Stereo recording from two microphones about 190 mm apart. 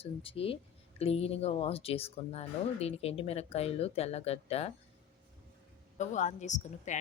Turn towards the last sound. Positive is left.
turn(degrees=40)  # may be behind; listen again after turning